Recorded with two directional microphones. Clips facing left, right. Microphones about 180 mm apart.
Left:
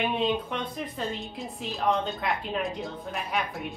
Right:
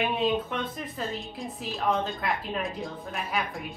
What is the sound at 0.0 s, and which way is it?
A woman's voice, 5° right (ahead or behind).